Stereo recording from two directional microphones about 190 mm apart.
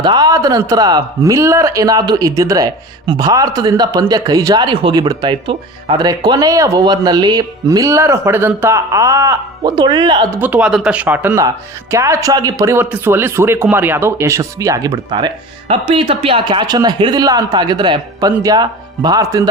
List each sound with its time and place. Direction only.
0.0 s speech: 20° right (ahead or behind)
10.4 s speech: 5° right (ahead or behind)